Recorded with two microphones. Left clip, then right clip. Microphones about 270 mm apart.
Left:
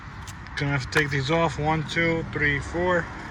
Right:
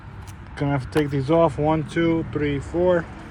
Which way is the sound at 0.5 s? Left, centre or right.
Centre.